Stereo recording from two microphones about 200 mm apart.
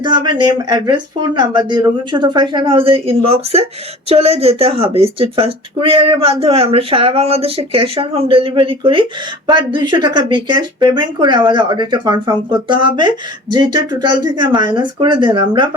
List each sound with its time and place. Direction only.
0.0 s speech: 20° right (ahead or behind)